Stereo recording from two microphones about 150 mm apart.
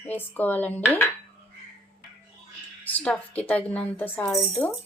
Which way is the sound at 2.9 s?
10° left (ahead or behind).